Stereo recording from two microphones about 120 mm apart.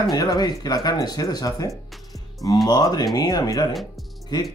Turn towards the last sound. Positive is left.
turn(degrees=35)  # may be behind; listen again after turning